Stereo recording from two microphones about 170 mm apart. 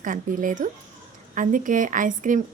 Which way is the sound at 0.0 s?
50° right (ahead or behind).